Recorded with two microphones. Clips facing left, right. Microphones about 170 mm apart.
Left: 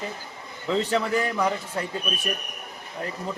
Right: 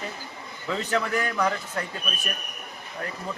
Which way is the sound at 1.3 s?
15° left (ahead or behind).